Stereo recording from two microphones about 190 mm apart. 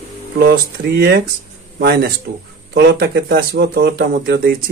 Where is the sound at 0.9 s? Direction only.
55° right (ahead or behind).